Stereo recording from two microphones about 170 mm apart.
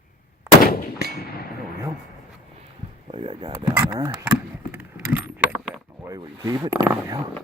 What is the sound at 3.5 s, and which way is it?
Speech, 15° right (ahead or behind).